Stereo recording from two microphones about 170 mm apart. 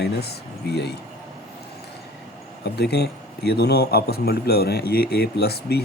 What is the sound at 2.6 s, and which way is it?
A man's voice, 75° left (ahead or behind).